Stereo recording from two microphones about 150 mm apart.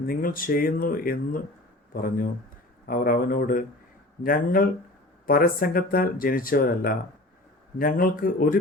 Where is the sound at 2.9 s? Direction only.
65° left (ahead or behind).